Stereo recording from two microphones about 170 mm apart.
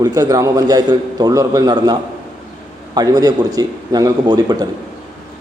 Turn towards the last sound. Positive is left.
turn(degrees=-25)  # may be behind; listen again after turning